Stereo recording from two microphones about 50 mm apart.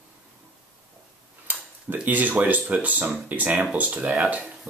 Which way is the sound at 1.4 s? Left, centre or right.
Right.